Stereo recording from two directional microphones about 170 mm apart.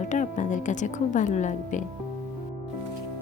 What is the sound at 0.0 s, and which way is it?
A woman's voice, 45° left (ahead or behind).